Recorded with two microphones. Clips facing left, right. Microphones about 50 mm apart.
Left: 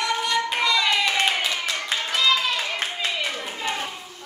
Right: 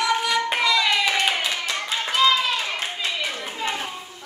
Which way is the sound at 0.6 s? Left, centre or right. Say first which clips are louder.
Even; centre.